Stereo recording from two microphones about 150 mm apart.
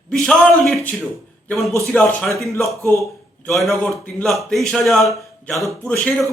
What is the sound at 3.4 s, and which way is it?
Speech, centre (ahead or behind).